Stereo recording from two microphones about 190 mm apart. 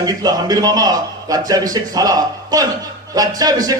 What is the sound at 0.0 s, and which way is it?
A man's voice, 20° right (ahead or behind).